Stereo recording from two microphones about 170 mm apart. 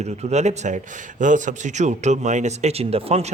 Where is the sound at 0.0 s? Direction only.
40° right (ahead or behind).